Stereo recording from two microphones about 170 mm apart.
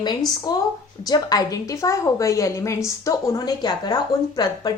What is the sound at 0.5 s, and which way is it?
Speech, 25° left (ahead or behind).